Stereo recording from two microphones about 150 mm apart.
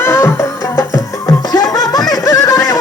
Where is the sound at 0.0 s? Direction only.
15° left (ahead or behind).